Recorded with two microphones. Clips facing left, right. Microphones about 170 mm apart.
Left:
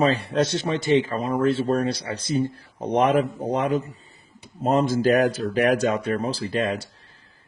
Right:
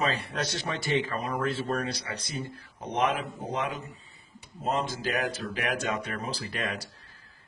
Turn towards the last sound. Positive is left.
turn(degrees=30)  # may be behind; listen again after turning